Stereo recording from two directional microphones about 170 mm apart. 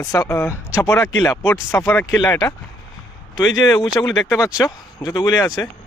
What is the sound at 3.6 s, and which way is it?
Speech, 20° left (ahead or behind).